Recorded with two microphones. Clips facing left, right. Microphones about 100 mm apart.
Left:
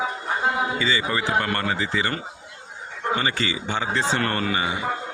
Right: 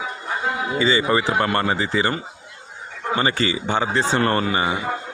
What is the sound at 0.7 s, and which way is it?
Speech, 35° right (ahead or behind).